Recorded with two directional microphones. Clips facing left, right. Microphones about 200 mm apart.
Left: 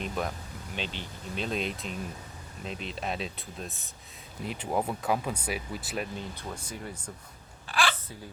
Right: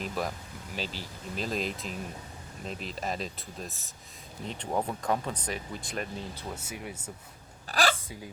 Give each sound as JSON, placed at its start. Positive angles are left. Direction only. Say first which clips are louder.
{"t": 0.0, "sound": "speech", "louder": "even", "side_deg": 0}
{"t": 6.5, "sound": "speech", "louder": "even", "side_deg": -5}
{"t": 7.7, "sound": "a sound", "louder": "right 2 dB", "side_deg": -40}